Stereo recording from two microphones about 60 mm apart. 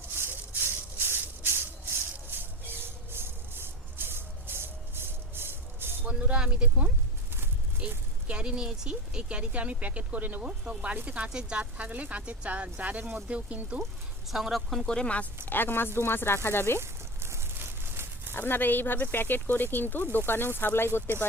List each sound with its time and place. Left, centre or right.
0.1 s maraca: right
2.4 s music: right
6.1 s speech: centre
14.3 s speech: centre
14.8 s speech: centre
15.4 s speech: left
16.8 s a sound: right
18.3 s speech: left